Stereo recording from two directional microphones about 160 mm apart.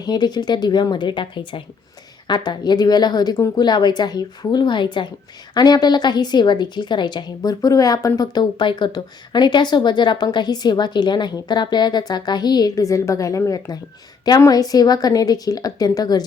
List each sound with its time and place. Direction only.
0.0 s a woman's voice: 25° left (ahead or behind)